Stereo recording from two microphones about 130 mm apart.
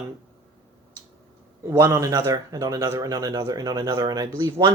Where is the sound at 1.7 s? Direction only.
25° right (ahead or behind).